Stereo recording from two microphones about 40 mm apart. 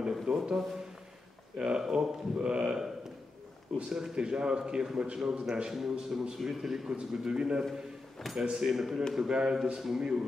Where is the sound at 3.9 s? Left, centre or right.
Centre.